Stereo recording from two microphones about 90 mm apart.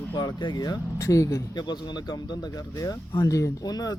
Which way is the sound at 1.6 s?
55° left (ahead or behind).